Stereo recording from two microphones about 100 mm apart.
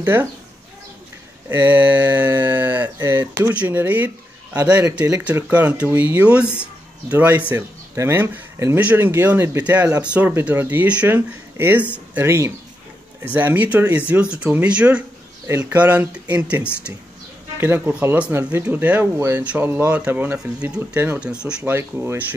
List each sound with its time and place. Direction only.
0.0 s speech: 20° right (ahead or behind)
1.5 s speech: 20° right (ahead or behind)
12.3 s speech: 25° right (ahead or behind)
21.6 s speech: 25° right (ahead or behind)